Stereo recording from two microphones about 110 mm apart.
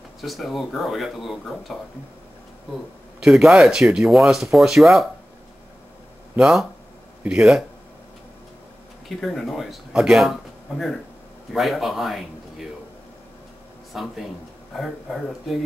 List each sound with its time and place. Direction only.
0.2 s speech: centre (ahead or behind)
3.3 s speech: 5° right (ahead or behind)
6.3 s speech: 5° right (ahead or behind)
9.2 s speech: centre (ahead or behind)
11.5 s speech: centre (ahead or behind)
13.9 s speech: 5° right (ahead or behind)